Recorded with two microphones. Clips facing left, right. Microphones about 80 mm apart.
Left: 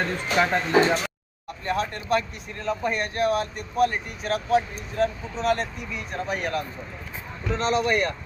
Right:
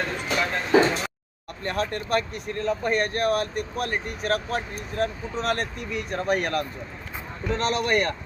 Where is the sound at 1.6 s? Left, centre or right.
Right.